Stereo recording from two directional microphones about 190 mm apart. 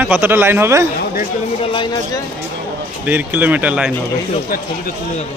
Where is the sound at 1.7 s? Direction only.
25° left (ahead or behind).